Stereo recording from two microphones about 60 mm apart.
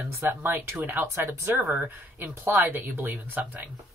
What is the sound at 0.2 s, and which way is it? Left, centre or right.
Speech, right.